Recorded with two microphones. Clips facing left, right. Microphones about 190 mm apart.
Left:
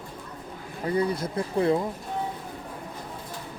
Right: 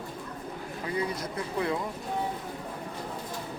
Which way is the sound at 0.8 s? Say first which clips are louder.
Left 6 dB; 35° left (ahead or behind).